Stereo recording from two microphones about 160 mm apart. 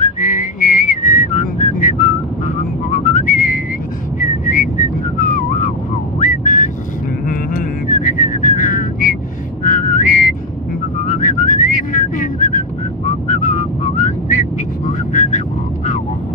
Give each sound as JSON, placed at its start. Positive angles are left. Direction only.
{"t": 0.2, "sound": "whistling", "side_deg": 55}
{"t": 14.9, "sound": "vehicle", "side_deg": 50}